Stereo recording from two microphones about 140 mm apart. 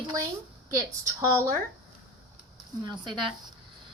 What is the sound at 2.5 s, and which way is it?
Speech, 30° right (ahead or behind).